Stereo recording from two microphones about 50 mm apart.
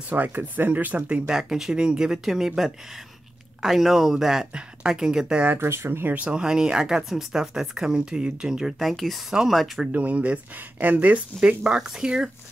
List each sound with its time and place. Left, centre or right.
0.1 s speech: right
1.3 s speech: centre
4.5 s speech: centre
5.6 s speech: right
6.1 s speech: right
6.4 s speech: centre
8.7 s speech: centre
9.9 s speech: right
11.6 s speech: centre